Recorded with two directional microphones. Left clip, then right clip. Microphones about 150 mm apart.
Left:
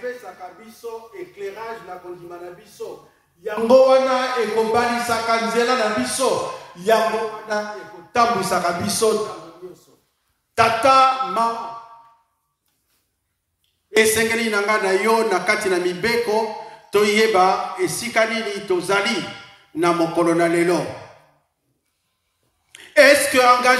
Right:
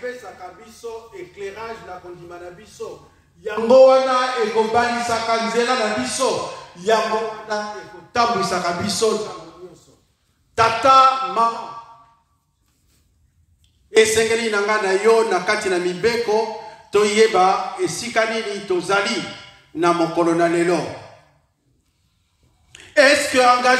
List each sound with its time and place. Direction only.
0.0 s speech: 25° right (ahead or behind)
2.8 s a man's voice: 10° right (ahead or behind)
3.6 s a man's voice: 45° left (ahead or behind)
10.5 s speech: 45° left (ahead or behind)
13.9 s speech: 50° left (ahead or behind)
22.7 s a woman's voice: 50° left (ahead or behind)